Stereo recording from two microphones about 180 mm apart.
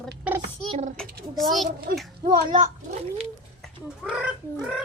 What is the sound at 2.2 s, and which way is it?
Speech, 55° right (ahead or behind).